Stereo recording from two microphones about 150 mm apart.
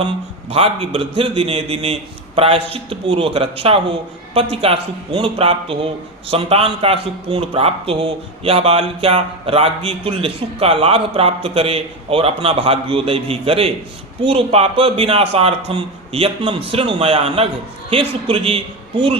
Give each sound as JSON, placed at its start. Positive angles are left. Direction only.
{"t": 0.5, "sound": "speech", "side_deg": -40}